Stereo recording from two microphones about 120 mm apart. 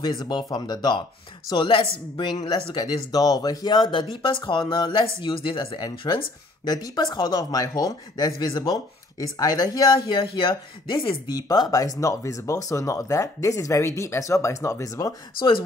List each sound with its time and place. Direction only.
0.0 s a woman's voice: 40° left (ahead or behind)